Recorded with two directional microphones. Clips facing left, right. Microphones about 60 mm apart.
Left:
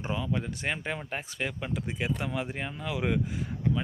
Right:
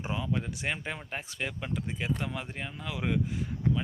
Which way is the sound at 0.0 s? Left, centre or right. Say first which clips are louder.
Left 1 dB; centre.